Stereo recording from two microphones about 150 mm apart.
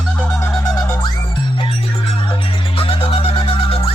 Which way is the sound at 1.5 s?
35° left (ahead or behind).